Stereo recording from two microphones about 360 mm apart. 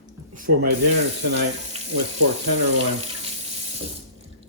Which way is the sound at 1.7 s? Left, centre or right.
Centre.